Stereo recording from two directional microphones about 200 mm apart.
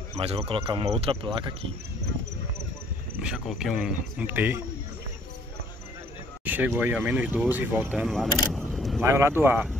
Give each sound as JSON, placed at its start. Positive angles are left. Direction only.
{"t": 0.1, "sound": "speech", "side_deg": -30}
{"t": 3.2, "sound": "speech", "side_deg": -5}
{"t": 6.4, "sound": "speech", "side_deg": -10}
{"t": 9.0, "sound": "speech", "side_deg": -15}